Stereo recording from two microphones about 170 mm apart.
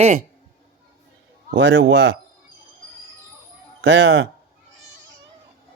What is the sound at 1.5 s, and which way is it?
Speech, 90° right.